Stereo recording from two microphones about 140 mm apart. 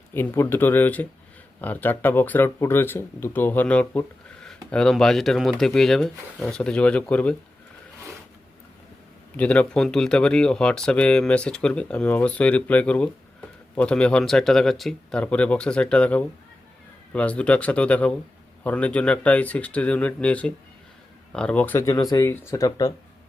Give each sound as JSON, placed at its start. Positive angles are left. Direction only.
{"t": 0.1, "sound": "speech", "side_deg": 15}
{"t": 9.3, "sound": "speech", "side_deg": 10}